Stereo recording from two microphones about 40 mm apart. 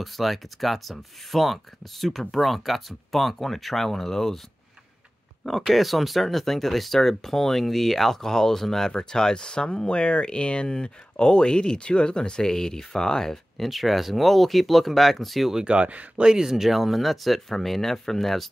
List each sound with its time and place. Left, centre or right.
0.0 s speech: centre
5.4 s speech: centre
13.6 s speech: centre
15.6 s speech: right
16.2 s speech: centre
16.4 s speech: centre